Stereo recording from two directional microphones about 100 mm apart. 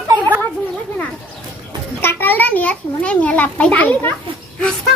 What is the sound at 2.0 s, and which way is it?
A child's voice, 20° left (ahead or behind).